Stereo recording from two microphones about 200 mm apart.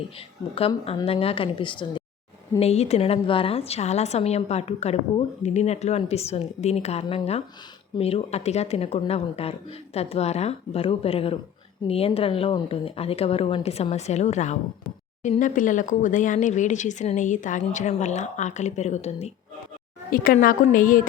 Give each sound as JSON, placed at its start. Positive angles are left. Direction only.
{"t": 0.2, "sound": "a woman's voice", "side_deg": 30}
{"t": 20.1, "sound": "a woman's voice", "side_deg": 45}